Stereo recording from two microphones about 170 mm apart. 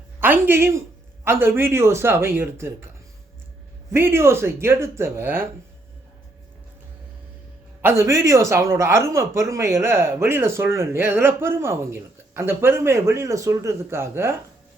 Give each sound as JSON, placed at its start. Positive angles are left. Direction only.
{"t": 0.2, "sound": "speech", "side_deg": -10}
{"t": 3.9, "sound": "speech", "side_deg": -15}
{"t": 7.8, "sound": "speech", "side_deg": -15}